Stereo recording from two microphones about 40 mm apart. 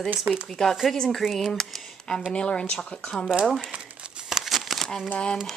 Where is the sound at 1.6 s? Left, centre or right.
Centre.